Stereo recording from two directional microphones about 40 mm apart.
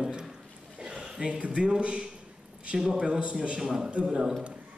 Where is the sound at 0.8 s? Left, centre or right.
Right.